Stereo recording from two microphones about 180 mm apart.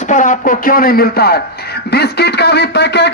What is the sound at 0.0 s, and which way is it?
Speech, 45° left (ahead or behind).